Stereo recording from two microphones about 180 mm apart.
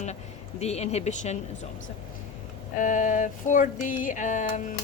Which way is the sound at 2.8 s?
45° left (ahead or behind).